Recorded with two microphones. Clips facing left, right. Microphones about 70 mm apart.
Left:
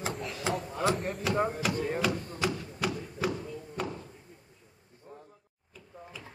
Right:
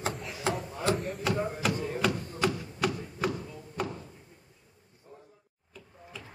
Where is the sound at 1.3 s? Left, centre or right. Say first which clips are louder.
Left 1 dB; centre.